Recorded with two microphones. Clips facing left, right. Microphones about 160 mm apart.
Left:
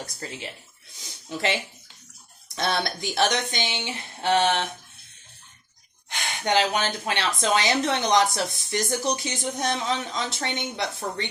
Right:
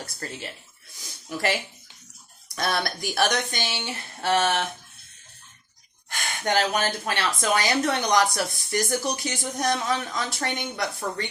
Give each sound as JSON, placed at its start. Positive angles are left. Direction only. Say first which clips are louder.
{"t": 0.0, "sound": "speech", "louder": "even", "side_deg": 15}
{"t": 2.6, "sound": "speech", "louder": "left 1 dB", "side_deg": 25}
{"t": 6.1, "sound": "a sound", "louder": "left 1 dB", "side_deg": 20}
{"t": 7.0, "sound": "speech", "louder": "left 1 dB", "side_deg": 20}